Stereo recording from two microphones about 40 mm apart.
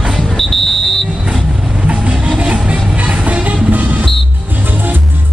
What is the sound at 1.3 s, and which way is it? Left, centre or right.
Vehicle, centre.